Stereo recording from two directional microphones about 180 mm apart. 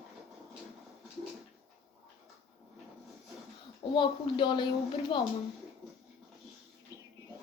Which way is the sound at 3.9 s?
25° left (ahead or behind).